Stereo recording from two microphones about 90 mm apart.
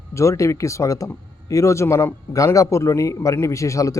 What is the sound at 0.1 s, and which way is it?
A man's voice, 35° left (ahead or behind).